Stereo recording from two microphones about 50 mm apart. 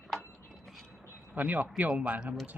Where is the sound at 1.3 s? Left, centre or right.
Right.